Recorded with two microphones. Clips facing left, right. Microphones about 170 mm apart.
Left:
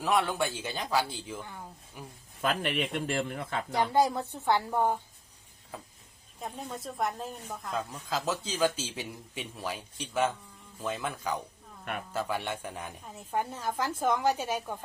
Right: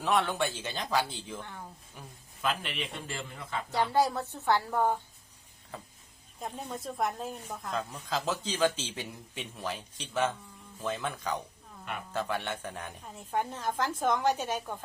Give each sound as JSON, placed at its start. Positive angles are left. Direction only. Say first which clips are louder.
{"t": 0.0, "sound": "a man's voice", "louder": "left 1 dB", "side_deg": 10}
{"t": 2.4, "sound": "speech", "louder": "left 4 dB", "side_deg": 55}
{"t": 3.8, "sound": "a man's voice", "louder": "left 1 dB", "side_deg": 15}
{"t": 6.4, "sound": "a woman's voice", "louder": "even", "side_deg": 0}